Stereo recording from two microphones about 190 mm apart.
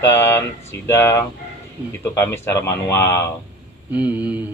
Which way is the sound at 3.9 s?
10° right (ahead or behind).